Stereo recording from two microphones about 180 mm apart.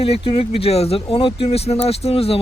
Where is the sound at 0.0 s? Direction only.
35° left (ahead or behind).